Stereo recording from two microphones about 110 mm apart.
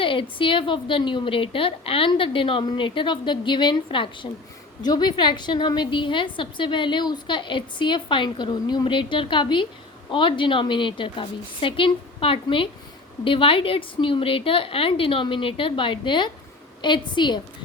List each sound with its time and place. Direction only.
0.0 s a woman's voice: 50° left (ahead or behind)